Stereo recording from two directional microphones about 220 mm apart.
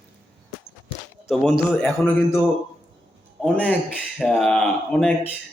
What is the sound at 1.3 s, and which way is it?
Speech, centre (ahead or behind).